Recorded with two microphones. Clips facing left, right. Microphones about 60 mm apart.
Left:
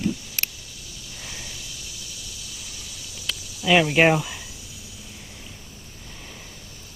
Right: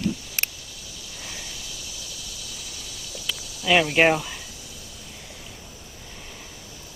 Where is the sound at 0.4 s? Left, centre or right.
Right.